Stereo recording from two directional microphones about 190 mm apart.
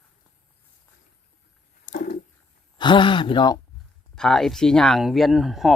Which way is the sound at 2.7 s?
25° left (ahead or behind).